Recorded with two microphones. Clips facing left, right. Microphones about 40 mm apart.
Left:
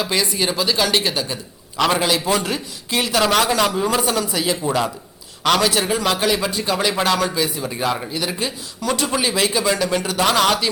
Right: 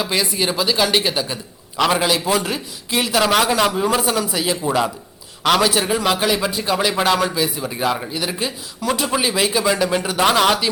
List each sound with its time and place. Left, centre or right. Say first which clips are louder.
0.0 s a man's voice: even; centre